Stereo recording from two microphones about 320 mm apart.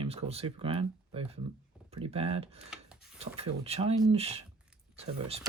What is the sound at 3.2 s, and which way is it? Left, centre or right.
Speech, centre.